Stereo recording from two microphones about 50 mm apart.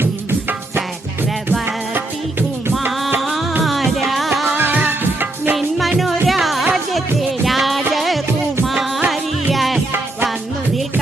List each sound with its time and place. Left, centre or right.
3.2 s music: centre
4.5 s music: right
5.5 s music: centre